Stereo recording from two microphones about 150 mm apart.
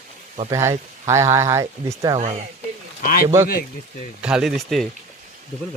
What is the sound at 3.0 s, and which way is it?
Speech, 70° left (ahead or behind).